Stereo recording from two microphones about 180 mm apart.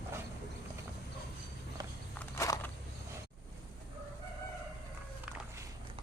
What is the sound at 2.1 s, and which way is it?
Walk, 15° left (ahead or behind).